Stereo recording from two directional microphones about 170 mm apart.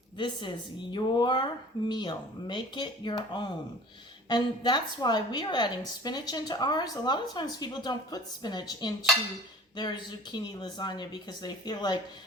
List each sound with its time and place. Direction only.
0.2 s speech: 25° left (ahead or behind)
4.3 s speech: 25° left (ahead or behind)